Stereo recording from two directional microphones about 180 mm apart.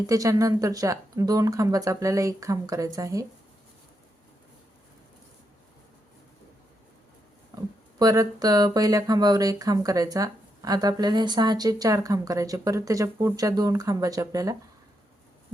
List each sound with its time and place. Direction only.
0.1 s speech: 20° right (ahead or behind)
7.5 s speech: 20° right (ahead or behind)